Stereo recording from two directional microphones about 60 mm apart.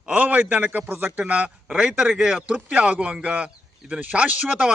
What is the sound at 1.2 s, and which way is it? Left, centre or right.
A man's voice, centre.